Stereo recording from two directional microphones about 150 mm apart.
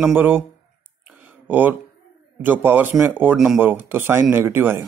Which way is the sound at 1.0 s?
10° right (ahead or behind).